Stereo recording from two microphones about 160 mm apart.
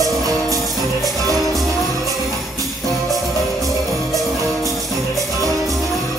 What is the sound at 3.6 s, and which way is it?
Music, centre (ahead or behind).